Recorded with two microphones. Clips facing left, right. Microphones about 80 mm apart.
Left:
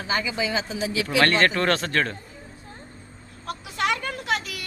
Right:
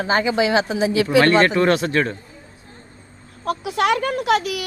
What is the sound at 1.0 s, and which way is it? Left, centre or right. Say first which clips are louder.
Speech: right 5 dB; right.